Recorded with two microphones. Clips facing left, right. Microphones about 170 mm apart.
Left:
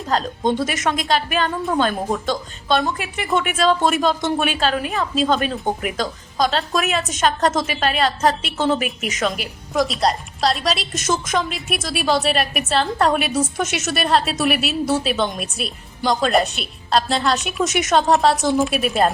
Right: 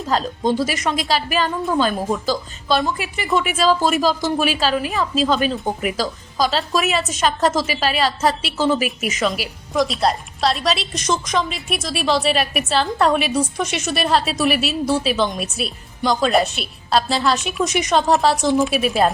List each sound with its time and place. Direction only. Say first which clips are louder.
0.4 s a woman's voice: even; centre (ahead or behind)
8.0 s a woman's voice: left 1 dB; 45° left (ahead or behind)
8.4 s a woman's voice: right 1 dB; 5° right (ahead or behind)